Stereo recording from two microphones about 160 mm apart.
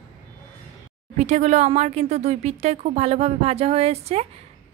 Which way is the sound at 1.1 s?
45° right (ahead or behind).